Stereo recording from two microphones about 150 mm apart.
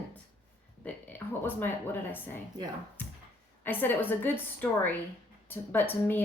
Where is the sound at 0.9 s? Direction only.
10° left (ahead or behind).